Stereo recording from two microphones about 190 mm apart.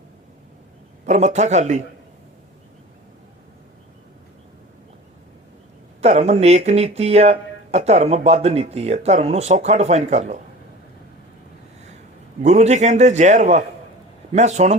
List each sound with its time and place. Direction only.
1.0 s speech: 35° right (ahead or behind)
6.0 s speech: 35° right (ahead or behind)
12.4 s speech: 35° right (ahead or behind)